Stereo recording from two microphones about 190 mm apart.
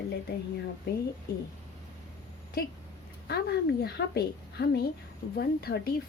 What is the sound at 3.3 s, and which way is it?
A woman's voice, 60° left (ahead or behind).